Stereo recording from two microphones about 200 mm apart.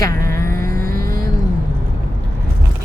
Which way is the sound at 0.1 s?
45° right (ahead or behind).